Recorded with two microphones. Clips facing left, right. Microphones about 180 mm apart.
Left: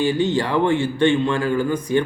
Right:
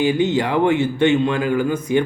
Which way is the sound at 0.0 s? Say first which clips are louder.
Right 2 dB; 20° right (ahead or behind).